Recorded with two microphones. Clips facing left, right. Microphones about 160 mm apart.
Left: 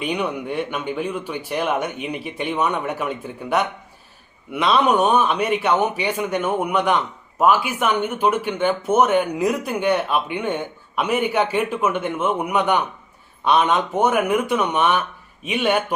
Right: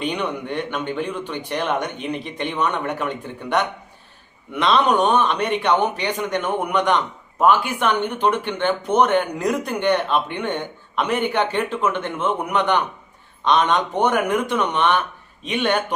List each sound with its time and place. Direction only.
0.0 s a man's voice: 5° left (ahead or behind)